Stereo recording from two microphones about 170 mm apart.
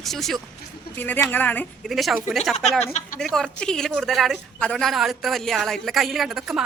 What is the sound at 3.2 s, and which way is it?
Speech, centre (ahead or behind).